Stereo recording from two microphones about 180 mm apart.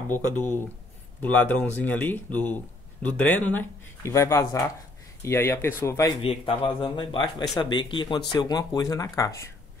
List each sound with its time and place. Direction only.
0.1 s speech: 10° left (ahead or behind)
6.2 s speech: 30° left (ahead or behind)